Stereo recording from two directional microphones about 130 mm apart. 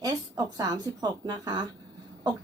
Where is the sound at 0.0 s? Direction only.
30° right (ahead or behind).